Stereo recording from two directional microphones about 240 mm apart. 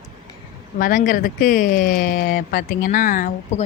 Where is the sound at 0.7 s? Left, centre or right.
Left.